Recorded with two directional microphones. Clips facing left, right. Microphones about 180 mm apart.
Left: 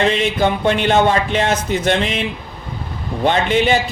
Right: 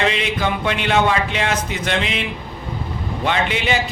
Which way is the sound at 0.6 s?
40° left (ahead or behind).